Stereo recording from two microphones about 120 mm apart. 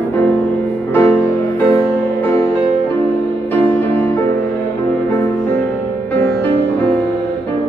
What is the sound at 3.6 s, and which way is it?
Music, 15° left (ahead or behind).